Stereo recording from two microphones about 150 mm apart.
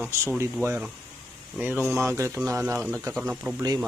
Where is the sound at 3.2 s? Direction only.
10° right (ahead or behind).